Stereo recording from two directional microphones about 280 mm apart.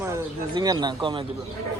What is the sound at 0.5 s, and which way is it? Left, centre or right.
Speech, centre.